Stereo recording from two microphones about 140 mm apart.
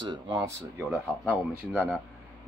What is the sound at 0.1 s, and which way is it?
Speech, 30° right (ahead or behind).